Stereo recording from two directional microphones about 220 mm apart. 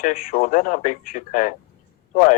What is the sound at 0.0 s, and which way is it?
Speech, 40° left (ahead or behind).